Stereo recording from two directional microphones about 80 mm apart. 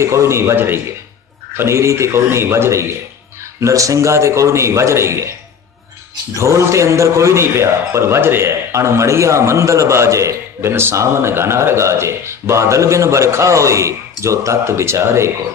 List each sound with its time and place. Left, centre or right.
0.0 s a man's voice: right
6.3 s a man's voice: right